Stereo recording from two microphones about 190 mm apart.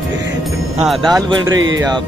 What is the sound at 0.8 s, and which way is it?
Speech, centre (ahead or behind).